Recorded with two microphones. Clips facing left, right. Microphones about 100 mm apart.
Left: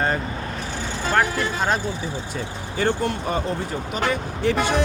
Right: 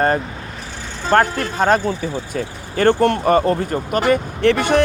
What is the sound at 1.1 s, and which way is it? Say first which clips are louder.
Speech: right 6 dB; 45° right (ahead or behind).